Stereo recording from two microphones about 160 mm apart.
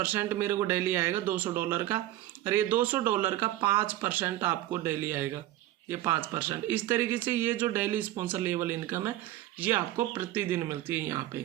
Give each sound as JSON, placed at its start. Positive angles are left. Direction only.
{"t": 0.0, "sound": "speech", "side_deg": -15}